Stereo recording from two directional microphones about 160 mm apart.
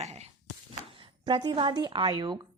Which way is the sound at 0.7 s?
30° right (ahead or behind).